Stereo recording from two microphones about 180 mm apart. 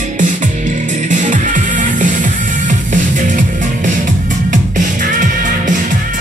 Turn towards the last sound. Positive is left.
turn(degrees=-45)  # may be behind; listen again after turning